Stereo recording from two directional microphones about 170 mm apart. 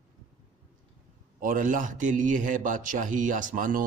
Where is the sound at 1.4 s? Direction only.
50° right (ahead or behind).